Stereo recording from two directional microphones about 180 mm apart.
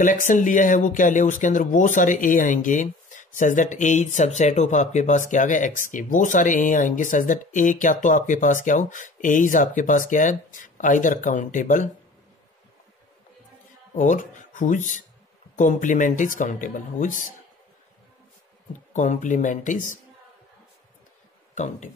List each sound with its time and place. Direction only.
0.0 s speech: 45° left (ahead or behind)
13.9 s speech: 45° left (ahead or behind)
18.9 s speech: 45° left (ahead or behind)
21.5 s speech: 40° left (ahead or behind)